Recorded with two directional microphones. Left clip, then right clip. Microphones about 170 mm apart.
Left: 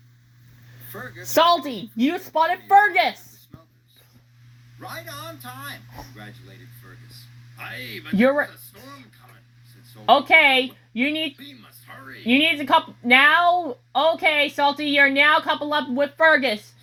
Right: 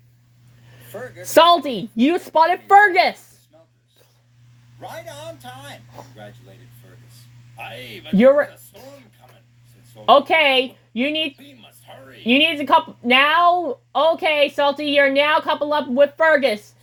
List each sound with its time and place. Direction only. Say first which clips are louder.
1.3 s a woman's voice: right 5 dB; 60° right (ahead or behind); by 3.1 s 75° right (ahead or behind)
5.6 s speech: left 2 dB; 45° right (ahead or behind)
7.7 s speech: left 4 dB; 5° right (ahead or behind)
8.1 s speech: right 6 dB; 45° right (ahead or behind)
10.1 s speech: right 1 dB; 50° right (ahead or behind)
11.9 s speech: left 2 dB; 10° right (ahead or behind)
12.2 s speech: right 2 dB; 55° right (ahead or behind)